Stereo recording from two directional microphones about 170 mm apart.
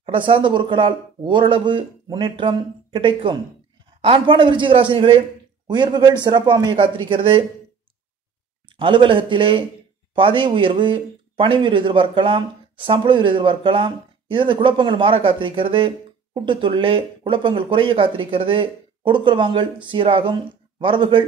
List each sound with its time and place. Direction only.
0.0 s speech: 30° right (ahead or behind)
8.7 s speech: 30° right (ahead or behind)